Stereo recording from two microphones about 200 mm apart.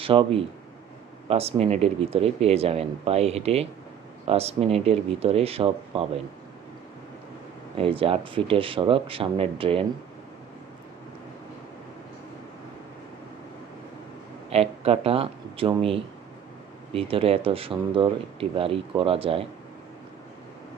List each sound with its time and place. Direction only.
0.0 s speech: 25° right (ahead or behind)
7.8 s speech: 25° right (ahead or behind)
14.5 s speech: 30° right (ahead or behind)